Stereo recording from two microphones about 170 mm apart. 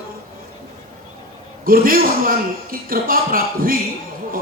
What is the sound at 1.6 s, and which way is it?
A man's voice, 55° right (ahead or behind).